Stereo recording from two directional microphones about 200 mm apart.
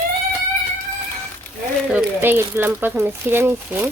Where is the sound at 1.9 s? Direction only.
10° right (ahead or behind).